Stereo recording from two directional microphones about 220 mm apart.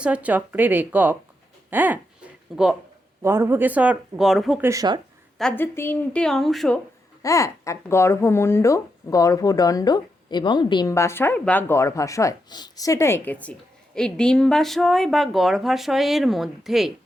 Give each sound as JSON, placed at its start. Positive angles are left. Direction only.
{"t": 0.0, "sound": "a woman's voice", "side_deg": -5}
{"t": 3.2, "sound": "speech", "side_deg": -10}
{"t": 4.7, "sound": "speech", "side_deg": -15}
{"t": 5.4, "sound": "a woman's voice", "side_deg": 5}
{"t": 7.2, "sound": "speech", "side_deg": 15}